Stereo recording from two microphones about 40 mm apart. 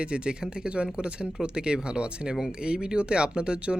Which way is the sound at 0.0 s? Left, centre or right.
Right.